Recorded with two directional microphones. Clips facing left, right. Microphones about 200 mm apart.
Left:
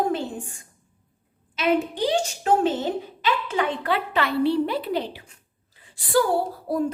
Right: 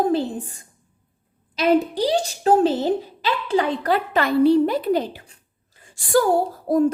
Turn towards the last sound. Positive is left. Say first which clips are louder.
# right 7 dB
turn(degrees=-45)  # may be behind; listen again after turning